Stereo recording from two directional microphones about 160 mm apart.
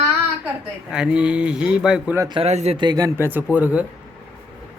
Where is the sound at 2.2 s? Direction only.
25° right (ahead or behind).